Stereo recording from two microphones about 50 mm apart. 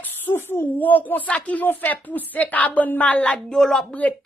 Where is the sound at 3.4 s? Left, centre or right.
Centre.